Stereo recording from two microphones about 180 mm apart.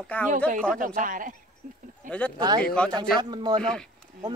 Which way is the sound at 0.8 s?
45° right (ahead or behind).